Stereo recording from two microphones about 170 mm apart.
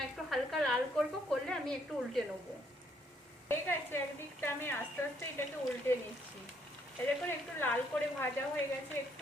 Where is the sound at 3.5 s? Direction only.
15° left (ahead or behind).